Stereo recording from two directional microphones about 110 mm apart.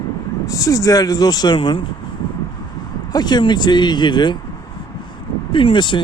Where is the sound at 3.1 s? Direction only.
40° left (ahead or behind).